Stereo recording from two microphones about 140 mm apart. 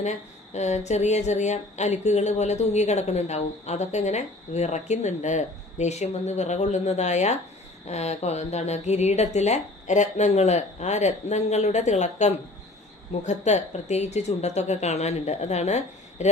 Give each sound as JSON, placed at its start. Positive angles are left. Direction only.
{"t": 0.5, "sound": "a woman's voice", "side_deg": 55}